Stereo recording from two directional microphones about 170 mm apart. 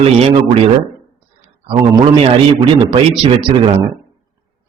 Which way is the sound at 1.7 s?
30° right (ahead or behind).